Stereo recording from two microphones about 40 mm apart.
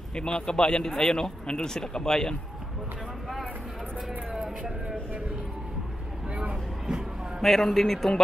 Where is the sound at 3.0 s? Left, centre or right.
Centre.